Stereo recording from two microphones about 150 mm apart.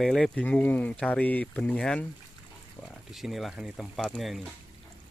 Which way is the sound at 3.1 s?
Centre (ahead or behind).